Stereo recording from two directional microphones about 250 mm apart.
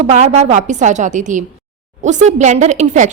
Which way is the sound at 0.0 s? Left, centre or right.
Right.